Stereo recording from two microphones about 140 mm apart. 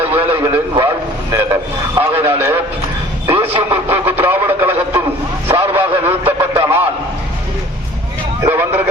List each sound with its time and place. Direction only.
0.1 s radio: 15° right (ahead or behind)
1.3 s train: 20° right (ahead or behind)
2.0 s radio: 15° right (ahead or behind)
5.5 s vehicle: 20° right (ahead or behind)
6.1 s radio: 20° right (ahead or behind)
8.4 s a sound: 20° right (ahead or behind)